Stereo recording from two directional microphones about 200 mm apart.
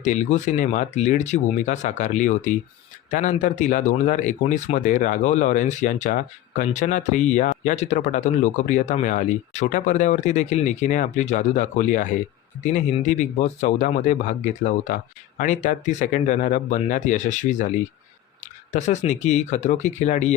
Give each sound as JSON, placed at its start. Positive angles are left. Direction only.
{"t": 0.0, "sound": "speech", "side_deg": 35}
{"t": 18.7, "sound": "speech", "side_deg": 35}